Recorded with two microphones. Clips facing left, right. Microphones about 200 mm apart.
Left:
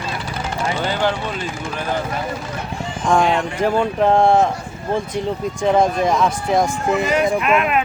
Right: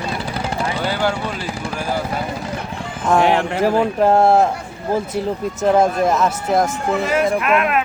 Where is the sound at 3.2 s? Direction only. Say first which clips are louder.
Right 2 dB; 65° right (ahead or behind).